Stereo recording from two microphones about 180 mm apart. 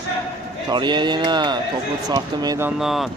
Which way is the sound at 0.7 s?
25° right (ahead or behind).